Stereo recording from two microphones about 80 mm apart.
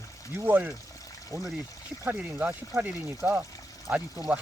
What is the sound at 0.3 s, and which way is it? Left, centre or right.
Speech, right.